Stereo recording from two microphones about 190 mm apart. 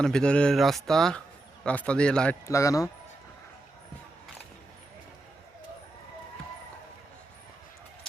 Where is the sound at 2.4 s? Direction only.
15° left (ahead or behind).